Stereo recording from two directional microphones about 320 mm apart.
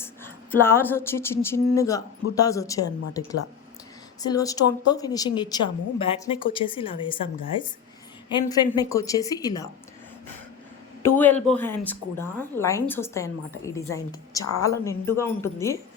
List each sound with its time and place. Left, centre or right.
0.0 s a sound: centre
2.3 s a woman's voice: centre
4.2 s a woman's voice: centre
11.0 s a woman's voice: centre